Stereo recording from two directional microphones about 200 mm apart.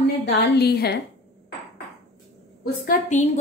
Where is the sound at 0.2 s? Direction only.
55° left (ahead or behind).